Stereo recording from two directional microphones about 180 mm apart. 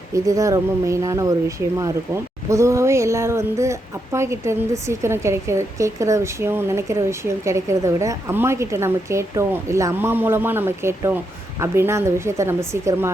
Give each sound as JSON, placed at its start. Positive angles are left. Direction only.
{"t": 0.1, "sound": "speech", "side_deg": -20}